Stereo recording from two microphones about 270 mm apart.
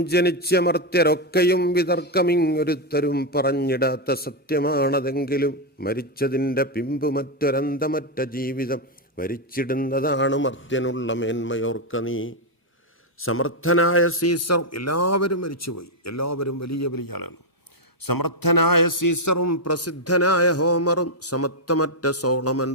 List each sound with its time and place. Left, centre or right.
0.0 s a man's voice: left
19.0 s a man's voice: left